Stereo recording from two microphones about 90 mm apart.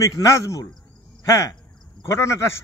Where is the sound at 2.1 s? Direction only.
30° left (ahead or behind).